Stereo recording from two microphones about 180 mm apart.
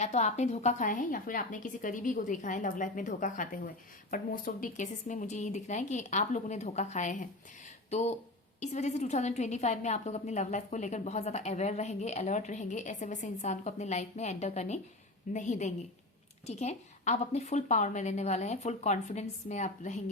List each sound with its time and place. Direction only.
0.0 s a woman's voice: 40° left (ahead or behind)